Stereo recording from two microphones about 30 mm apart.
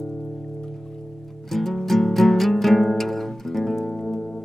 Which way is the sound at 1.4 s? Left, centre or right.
Centre.